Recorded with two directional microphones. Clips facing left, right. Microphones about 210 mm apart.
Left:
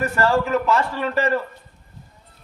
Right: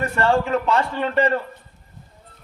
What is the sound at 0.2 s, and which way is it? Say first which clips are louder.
Speech: even; 30° right (ahead or behind).